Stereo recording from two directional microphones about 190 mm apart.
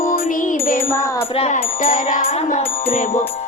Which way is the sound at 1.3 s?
35° left (ahead or behind).